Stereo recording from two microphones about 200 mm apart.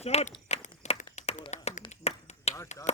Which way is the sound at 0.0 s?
35° left (ahead or behind).